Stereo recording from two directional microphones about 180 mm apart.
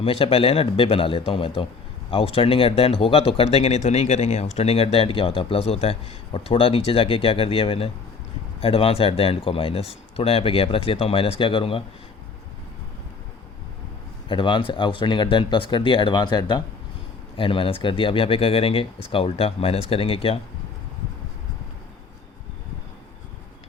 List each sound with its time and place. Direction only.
0.0 s speech: 35° left (ahead or behind)
14.3 s speech: 25° left (ahead or behind)